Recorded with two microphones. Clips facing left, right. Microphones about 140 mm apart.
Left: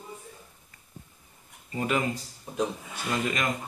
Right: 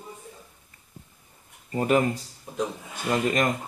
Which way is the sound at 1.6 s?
40° right (ahead or behind).